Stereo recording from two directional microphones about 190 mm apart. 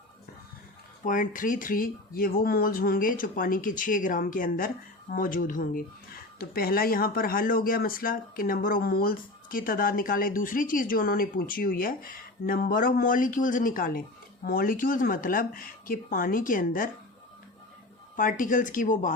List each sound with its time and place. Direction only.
1.0 s speech: 45° left (ahead or behind)
18.2 s speech: 45° left (ahead or behind)